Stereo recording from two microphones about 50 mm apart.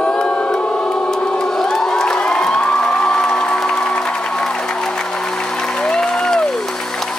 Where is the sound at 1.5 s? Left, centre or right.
Centre.